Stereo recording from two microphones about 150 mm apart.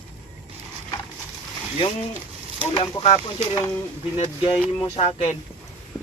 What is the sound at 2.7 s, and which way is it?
A man's voice, 40° left (ahead or behind).